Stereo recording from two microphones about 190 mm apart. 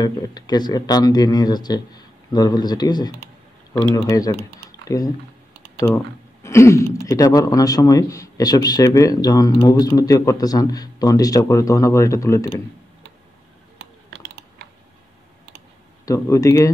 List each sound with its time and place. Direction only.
0.0 s speech: 20° left (ahead or behind)
13.7 s typing: 65° right (ahead or behind)
16.1 s speech: 20° left (ahead or behind)